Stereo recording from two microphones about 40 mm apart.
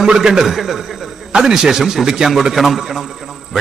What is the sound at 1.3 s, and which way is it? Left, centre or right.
Speech, centre.